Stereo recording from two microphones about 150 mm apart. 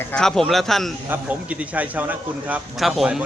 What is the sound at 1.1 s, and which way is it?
A man's voice, 10° right (ahead or behind).